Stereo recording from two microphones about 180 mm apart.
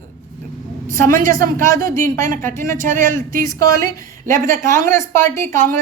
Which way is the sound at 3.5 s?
20° left (ahead or behind).